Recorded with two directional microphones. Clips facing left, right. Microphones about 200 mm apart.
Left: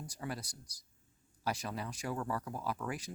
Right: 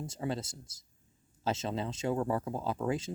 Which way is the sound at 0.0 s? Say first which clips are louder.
Right 7 dB; 25° right (ahead or behind).